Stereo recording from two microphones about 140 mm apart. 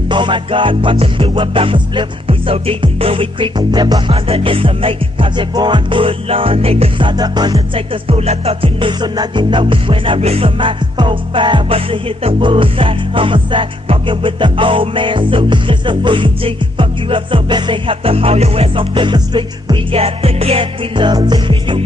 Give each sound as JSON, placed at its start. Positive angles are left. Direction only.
{"t": 0.1, "sound": "music", "side_deg": -35}
{"t": 4.1, "sound": "music", "side_deg": -40}